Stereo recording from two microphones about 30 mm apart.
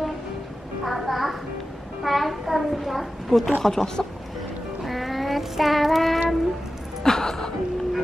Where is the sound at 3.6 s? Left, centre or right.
Centre.